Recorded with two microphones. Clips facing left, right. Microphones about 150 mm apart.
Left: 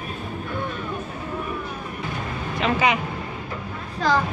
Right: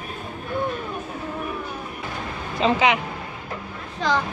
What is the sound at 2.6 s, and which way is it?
Speech, 30° right (ahead or behind).